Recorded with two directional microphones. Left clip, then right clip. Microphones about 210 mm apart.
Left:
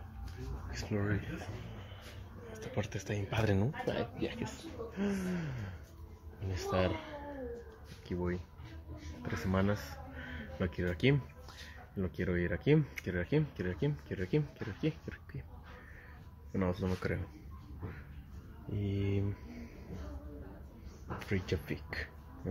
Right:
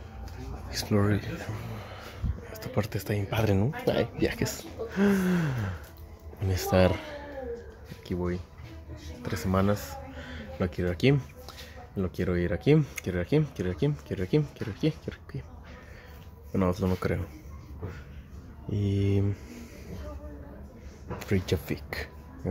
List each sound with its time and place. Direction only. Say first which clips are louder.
0.7 s speech: right 10 dB; 30° right (ahead or behind)
2.7 s speech: right 8 dB; 25° right (ahead or behind)
3.9 s speech: right 10 dB; 30° right (ahead or behind)
8.1 s speech: right 5 dB; 10° right (ahead or behind)
16.5 s speech: right 8 dB; 15° right (ahead or behind)
18.7 s speech: right 8 dB; 20° right (ahead or behind)
21.2 s speech: right 8 dB; 20° right (ahead or behind)